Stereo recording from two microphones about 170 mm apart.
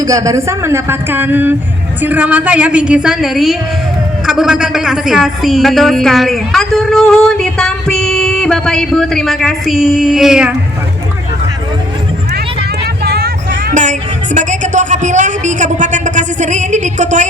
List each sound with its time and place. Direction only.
0.0 s a woman's voice: 20° right (ahead or behind); by 10.5 s 5° right (ahead or behind)
13.1 s vehicle: 65° right (ahead or behind)
14.3 s a sound: 45° right (ahead or behind)